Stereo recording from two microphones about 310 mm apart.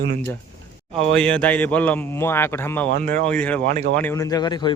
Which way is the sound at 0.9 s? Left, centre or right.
Centre.